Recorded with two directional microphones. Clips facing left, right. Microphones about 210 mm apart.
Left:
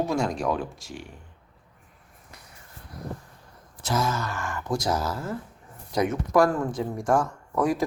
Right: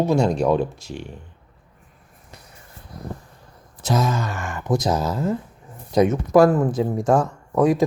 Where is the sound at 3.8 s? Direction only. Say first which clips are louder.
Right 5 dB; 20° right (ahead or behind).